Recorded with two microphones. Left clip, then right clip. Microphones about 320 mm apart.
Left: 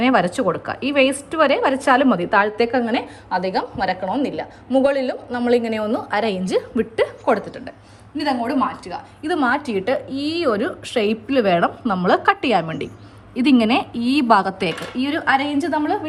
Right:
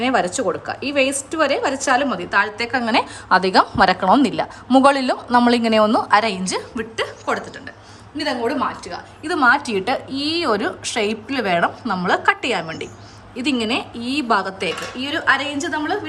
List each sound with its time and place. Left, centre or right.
0.0 s a woman's voice: centre
3.2 s a woman's voice: centre